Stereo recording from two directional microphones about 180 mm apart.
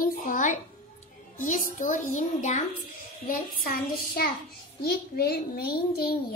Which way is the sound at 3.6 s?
55° left (ahead or behind).